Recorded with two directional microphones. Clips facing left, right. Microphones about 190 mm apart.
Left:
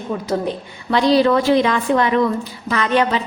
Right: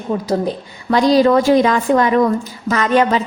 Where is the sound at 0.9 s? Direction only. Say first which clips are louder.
Right 3 dB; 40° right (ahead or behind).